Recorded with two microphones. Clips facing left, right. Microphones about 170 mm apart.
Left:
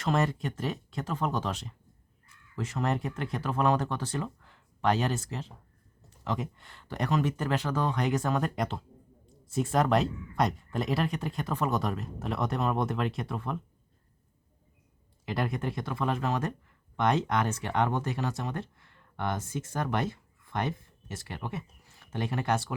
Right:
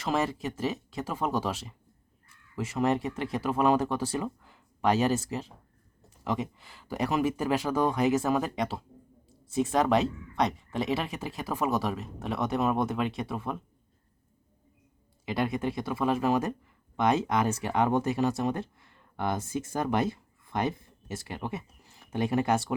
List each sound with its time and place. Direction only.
0.0 s speech: centre (ahead or behind)
15.3 s speech: centre (ahead or behind); by 22.7 s 20° right (ahead or behind)